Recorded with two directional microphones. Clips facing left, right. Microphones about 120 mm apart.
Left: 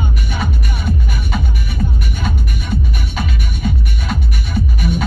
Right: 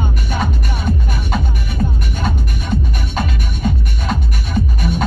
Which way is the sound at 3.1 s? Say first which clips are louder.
Right 3 dB; 45° right (ahead or behind).